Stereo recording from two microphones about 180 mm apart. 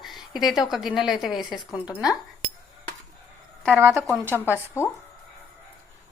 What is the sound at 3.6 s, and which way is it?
Speech, 10° right (ahead or behind).